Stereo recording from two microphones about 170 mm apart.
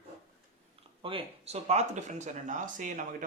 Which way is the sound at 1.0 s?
30° right (ahead or behind).